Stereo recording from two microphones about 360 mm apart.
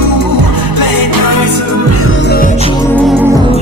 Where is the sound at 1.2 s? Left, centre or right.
Left.